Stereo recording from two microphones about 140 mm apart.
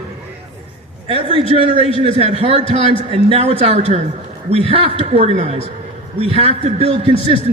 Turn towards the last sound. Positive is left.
turn(degrees=-45)  # may be behind; listen again after turning